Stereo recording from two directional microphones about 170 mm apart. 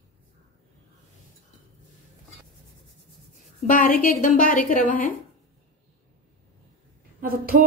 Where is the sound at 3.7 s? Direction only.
55° left (ahead or behind).